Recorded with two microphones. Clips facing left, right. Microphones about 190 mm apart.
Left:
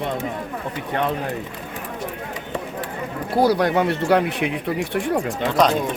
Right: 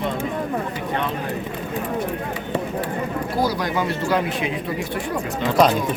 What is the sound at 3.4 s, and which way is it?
Speech, 65° left (ahead or behind).